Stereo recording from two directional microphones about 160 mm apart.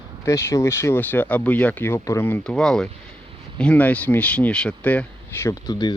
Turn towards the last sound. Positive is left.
turn(degrees=25)  # may be behind; listen again after turning